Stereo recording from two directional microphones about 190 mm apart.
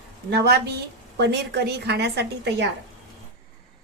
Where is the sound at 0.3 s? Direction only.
60° right (ahead or behind).